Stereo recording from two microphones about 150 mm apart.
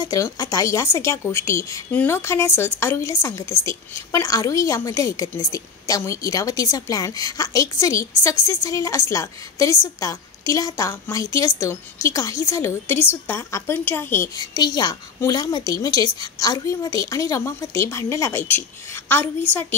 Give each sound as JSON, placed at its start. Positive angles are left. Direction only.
{"t": 0.0, "sound": "a woman's voice", "side_deg": 25}